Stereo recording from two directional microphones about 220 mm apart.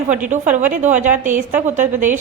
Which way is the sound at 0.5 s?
35° right (ahead or behind).